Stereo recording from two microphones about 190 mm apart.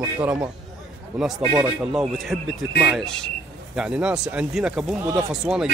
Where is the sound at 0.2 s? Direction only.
10° right (ahead or behind).